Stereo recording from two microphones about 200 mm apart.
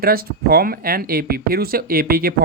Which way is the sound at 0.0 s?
50° right (ahead or behind).